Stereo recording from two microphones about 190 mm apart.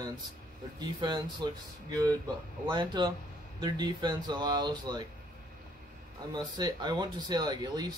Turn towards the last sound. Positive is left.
turn(degrees=-20)  # may be behind; listen again after turning